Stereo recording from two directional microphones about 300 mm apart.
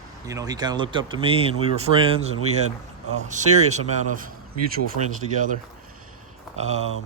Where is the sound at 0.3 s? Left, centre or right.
Centre.